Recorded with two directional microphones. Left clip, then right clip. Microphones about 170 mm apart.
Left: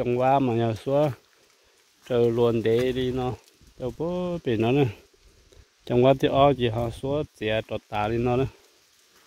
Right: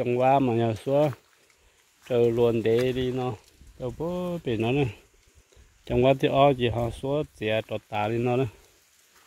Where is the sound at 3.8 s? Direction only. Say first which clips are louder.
Left 2 dB; 25° left (ahead or behind).